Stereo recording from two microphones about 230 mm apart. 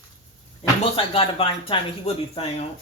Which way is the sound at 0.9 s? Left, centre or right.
Left.